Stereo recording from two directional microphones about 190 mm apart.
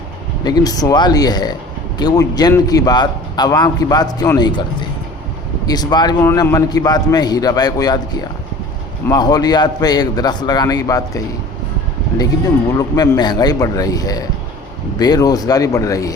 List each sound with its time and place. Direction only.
0.4 s a man's voice: 20° left (ahead or behind)
12.7 s a man's voice: 20° left (ahead or behind)